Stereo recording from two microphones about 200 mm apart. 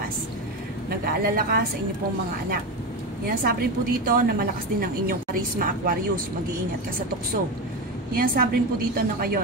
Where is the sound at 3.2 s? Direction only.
45° right (ahead or behind).